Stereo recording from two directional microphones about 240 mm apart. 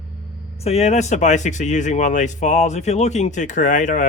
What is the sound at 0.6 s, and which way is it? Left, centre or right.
Speech, left.